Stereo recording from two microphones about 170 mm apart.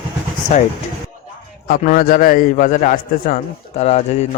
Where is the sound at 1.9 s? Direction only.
60° left (ahead or behind).